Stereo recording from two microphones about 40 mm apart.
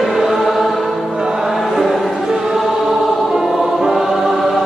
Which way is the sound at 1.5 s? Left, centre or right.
Centre.